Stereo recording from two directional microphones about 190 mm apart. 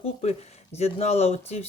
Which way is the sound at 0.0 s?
35° left (ahead or behind).